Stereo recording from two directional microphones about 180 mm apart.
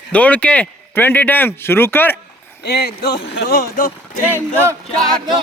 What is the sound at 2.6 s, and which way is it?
Speech, 60° left (ahead or behind).